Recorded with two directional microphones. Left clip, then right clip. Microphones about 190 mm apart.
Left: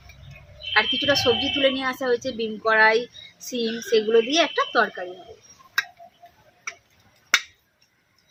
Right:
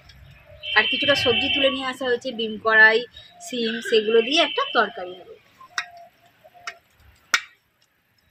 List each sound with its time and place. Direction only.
0.7 s speech: 5° right (ahead or behind)